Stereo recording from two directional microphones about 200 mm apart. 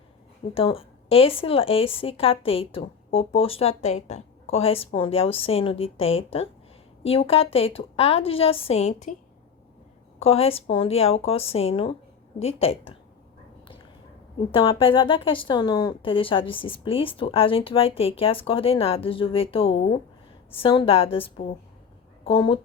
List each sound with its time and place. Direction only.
0.5 s a woman's voice: 30° left (ahead or behind)
10.2 s a woman's voice: 30° left (ahead or behind)
14.5 s a woman's voice: 25° left (ahead or behind)